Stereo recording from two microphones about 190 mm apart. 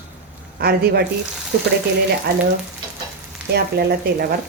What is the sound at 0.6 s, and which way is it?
Speech, 55° right (ahead or behind).